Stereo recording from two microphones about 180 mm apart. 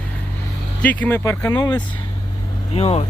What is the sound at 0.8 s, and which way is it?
Speech, 10° left (ahead or behind).